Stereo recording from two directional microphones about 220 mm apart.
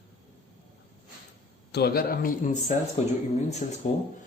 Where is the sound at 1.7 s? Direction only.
45° left (ahead or behind).